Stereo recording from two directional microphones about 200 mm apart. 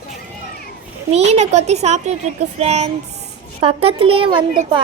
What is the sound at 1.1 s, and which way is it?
A woman's voice, 35° right (ahead or behind).